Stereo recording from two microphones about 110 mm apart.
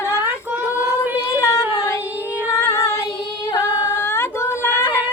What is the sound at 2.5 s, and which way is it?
Female singing, 25° left (ahead or behind).